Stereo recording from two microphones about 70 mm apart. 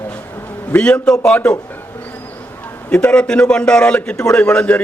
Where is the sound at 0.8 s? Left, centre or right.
Centre.